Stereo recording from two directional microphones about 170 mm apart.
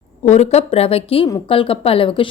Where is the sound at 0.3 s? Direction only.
40° left (ahead or behind).